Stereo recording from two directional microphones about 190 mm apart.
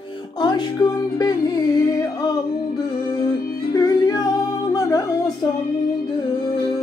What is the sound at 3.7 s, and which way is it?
Music, 20° left (ahead or behind).